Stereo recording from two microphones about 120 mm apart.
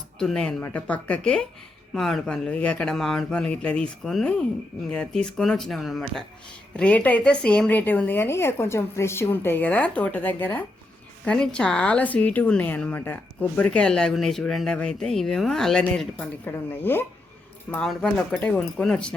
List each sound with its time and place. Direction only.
0.2 s speech: 5° left (ahead or behind)
6.7 s speech: 10° left (ahead or behind)
16.5 s speech: 20° left (ahead or behind)
17.8 s speech: 5° left (ahead or behind)